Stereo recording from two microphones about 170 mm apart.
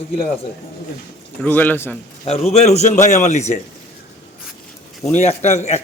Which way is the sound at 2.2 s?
35° left (ahead or behind).